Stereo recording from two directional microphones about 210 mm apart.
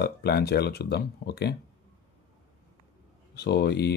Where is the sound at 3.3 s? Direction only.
50° left (ahead or behind).